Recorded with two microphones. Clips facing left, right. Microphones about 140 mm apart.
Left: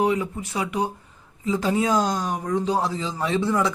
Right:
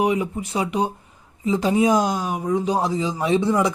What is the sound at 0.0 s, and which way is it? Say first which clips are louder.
Speech: right 1 dB; 15° right (ahead or behind).